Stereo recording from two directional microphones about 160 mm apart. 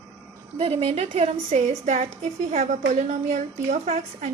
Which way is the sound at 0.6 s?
40° right (ahead or behind).